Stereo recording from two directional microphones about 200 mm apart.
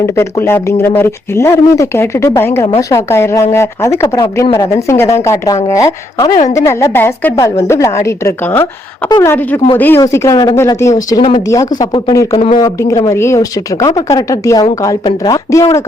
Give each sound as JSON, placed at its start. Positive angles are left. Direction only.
{"t": 0.0, "sound": "speech", "side_deg": 15}